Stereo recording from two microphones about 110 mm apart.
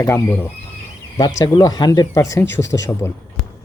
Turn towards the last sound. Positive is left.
turn(degrees=25)  # may be behind; listen again after turning